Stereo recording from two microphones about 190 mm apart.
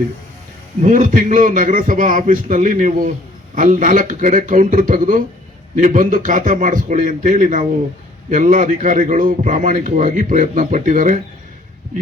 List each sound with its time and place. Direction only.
0.8 s a man's voice: 45° right (ahead or behind)